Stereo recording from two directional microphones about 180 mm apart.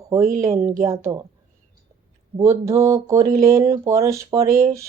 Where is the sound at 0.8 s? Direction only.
15° right (ahead or behind).